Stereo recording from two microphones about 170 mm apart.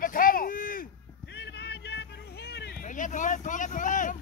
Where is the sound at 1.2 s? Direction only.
90° left; by 2.8 s 70° left (ahead or behind).